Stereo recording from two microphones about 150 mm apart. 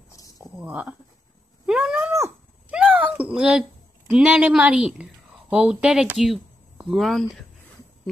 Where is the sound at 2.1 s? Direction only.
15° right (ahead or behind).